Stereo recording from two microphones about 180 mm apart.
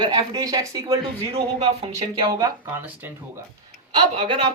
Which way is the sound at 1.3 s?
35° right (ahead or behind).